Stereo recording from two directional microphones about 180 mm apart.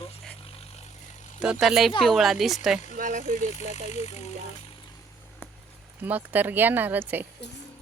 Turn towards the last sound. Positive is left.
turn(degrees=-10)  # may be behind; listen again after turning